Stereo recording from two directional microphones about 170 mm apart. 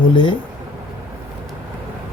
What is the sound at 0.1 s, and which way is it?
Speech, 25° left (ahead or behind).